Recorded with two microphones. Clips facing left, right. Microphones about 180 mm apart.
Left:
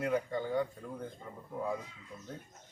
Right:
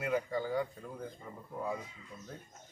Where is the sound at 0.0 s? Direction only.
Centre (ahead or behind).